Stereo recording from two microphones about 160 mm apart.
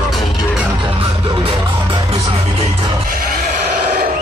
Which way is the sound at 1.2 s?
35° right (ahead or behind).